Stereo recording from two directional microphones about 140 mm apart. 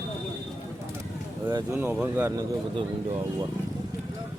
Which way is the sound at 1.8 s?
15° right (ahead or behind).